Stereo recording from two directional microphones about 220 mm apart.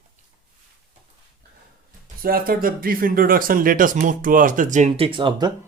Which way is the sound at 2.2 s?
40° right (ahead or behind).